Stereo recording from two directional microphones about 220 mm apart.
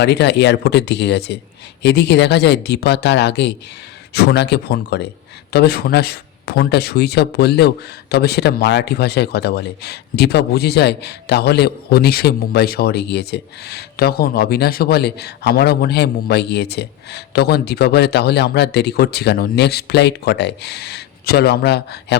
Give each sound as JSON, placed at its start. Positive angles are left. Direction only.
{"t": 0.0, "sound": "speech", "side_deg": 50}